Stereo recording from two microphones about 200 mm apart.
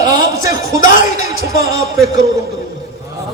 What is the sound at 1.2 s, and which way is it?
Speech, 50° right (ahead or behind).